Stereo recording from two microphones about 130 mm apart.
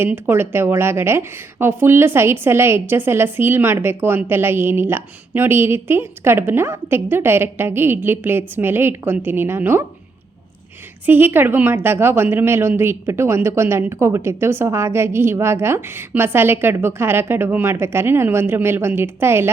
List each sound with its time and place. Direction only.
0.0 s a woman's voice: 15° right (ahead or behind)
11.0 s a woman's voice: 15° right (ahead or behind)